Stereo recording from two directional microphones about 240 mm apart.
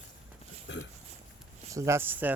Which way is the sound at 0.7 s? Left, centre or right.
Left.